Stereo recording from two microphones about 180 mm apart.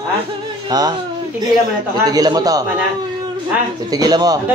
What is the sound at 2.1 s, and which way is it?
Speech, 20° right (ahead or behind).